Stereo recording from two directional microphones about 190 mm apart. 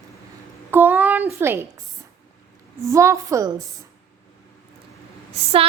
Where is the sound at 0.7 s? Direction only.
10° right (ahead or behind).